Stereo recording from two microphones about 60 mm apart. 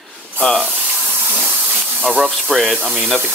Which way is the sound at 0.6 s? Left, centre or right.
Right.